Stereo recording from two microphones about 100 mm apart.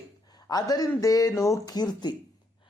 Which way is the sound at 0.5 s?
40° left (ahead or behind).